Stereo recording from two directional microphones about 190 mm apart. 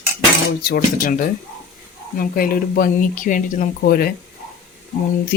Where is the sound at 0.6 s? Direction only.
50° left (ahead or behind).